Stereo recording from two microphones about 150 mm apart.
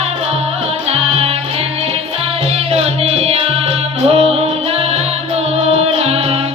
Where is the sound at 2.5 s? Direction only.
45° right (ahead or behind).